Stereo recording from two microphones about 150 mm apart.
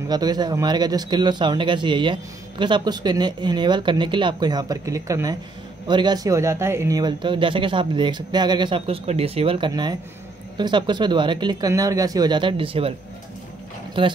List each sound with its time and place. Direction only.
0.1 s speech: 25° right (ahead or behind)
14.0 s speech: 35° right (ahead or behind)